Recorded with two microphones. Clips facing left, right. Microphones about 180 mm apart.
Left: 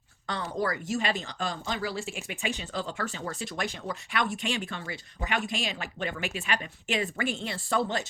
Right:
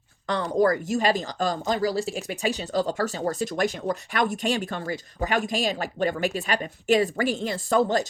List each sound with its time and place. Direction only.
0.4 s speech: 45° right (ahead or behind)